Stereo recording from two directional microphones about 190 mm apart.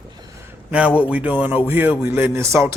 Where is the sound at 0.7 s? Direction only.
5° right (ahead or behind).